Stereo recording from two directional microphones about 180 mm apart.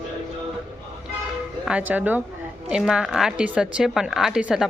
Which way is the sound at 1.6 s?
5° right (ahead or behind).